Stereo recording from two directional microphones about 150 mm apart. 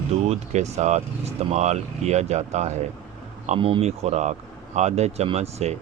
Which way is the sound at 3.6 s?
35° right (ahead or behind).